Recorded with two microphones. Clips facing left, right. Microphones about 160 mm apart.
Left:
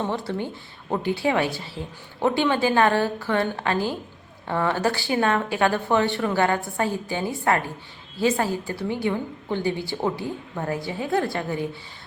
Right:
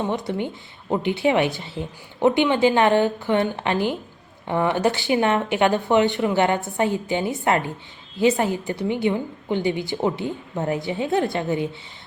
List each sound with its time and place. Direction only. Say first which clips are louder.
0.0 s a woman's voice: right 2 dB; 20° right (ahead or behind)